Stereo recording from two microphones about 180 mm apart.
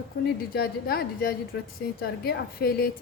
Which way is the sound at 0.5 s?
55° left (ahead or behind).